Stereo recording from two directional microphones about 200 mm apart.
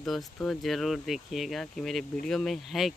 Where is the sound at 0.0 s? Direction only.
Centre (ahead or behind).